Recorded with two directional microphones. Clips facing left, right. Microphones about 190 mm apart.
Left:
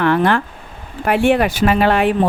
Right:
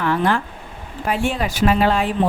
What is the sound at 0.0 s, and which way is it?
Speech, 65° left (ahead or behind).